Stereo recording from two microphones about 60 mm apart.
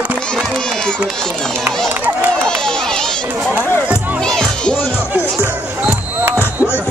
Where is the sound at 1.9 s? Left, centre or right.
Right.